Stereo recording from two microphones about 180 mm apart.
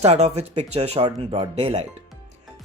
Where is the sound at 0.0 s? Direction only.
35° right (ahead or behind).